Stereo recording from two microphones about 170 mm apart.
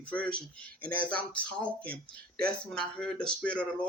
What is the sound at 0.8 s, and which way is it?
Speech, 55° right (ahead or behind).